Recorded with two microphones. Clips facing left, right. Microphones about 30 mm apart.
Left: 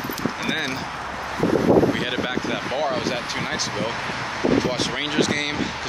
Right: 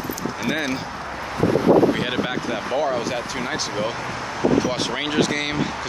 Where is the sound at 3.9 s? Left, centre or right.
Left.